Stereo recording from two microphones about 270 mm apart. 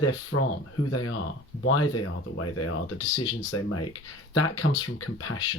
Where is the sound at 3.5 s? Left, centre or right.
Left.